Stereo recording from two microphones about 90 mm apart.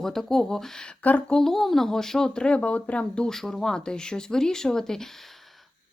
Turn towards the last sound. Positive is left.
turn(degrees=5)  # may be behind; listen again after turning